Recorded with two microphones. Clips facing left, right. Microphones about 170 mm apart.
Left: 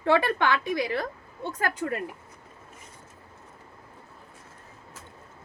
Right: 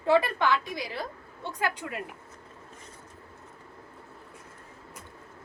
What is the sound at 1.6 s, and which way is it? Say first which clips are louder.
Speech: left 3 dB; 45° left (ahead or behind).